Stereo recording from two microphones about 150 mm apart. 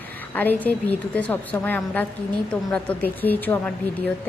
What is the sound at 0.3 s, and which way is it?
A woman's voice, 10° left (ahead or behind).